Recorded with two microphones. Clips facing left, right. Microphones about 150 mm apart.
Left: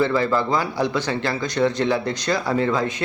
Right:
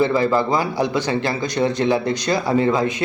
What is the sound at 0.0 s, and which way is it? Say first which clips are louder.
A man's voice: right 2 dB; 15° right (ahead or behind).